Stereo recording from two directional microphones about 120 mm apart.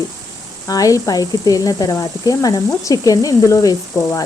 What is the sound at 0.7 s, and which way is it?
Speech, 30° left (ahead or behind).